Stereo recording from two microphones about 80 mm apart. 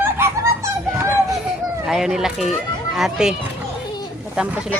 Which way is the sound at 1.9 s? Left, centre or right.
Centre.